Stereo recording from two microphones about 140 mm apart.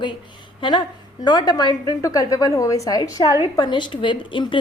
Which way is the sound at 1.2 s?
30° left (ahead or behind).